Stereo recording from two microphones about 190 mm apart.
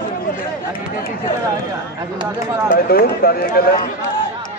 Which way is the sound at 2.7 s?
50° left (ahead or behind).